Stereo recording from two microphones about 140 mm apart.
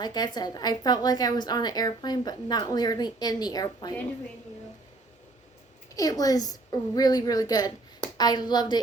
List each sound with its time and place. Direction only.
0.0 s a woman's voice: 30° left (ahead or behind)
5.9 s a woman's voice: 25° left (ahead or behind)